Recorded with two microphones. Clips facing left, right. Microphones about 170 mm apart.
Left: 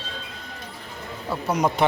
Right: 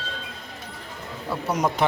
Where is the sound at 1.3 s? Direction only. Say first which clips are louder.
Left 1 dB; centre (ahead or behind).